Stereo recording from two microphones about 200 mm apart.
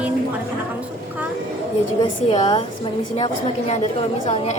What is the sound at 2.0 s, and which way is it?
A woman's voice, 25° left (ahead or behind).